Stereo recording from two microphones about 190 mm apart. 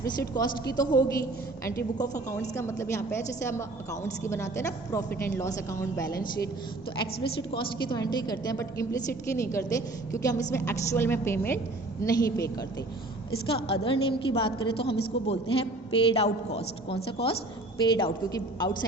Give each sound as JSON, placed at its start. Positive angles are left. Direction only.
{"t": 0.0, "sound": "a woman's voice", "side_deg": 20}
{"t": 13.5, "sound": "a woman's voice", "side_deg": 30}
{"t": 16.0, "sound": "a woman's voice", "side_deg": 30}